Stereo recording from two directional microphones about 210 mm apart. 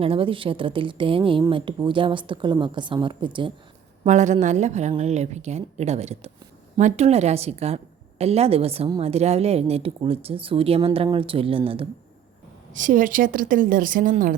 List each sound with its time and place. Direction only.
0.0 s a woman's voice: 25° right (ahead or behind)
4.0 s a woman's voice: 35° right (ahead or behind)
12.7 s a woman's voice: 40° right (ahead or behind)